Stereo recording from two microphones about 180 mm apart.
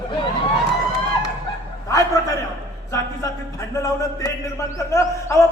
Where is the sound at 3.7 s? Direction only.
15° left (ahead or behind).